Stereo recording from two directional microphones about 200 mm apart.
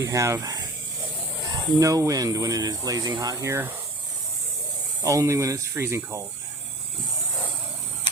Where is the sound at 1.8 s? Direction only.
15° right (ahead or behind).